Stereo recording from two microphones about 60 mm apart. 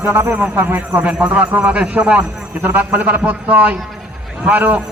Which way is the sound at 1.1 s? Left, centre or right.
Right.